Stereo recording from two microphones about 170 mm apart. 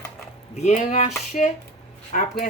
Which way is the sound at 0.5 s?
45° left (ahead or behind).